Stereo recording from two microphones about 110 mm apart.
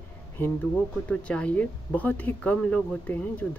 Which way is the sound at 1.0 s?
10° left (ahead or behind).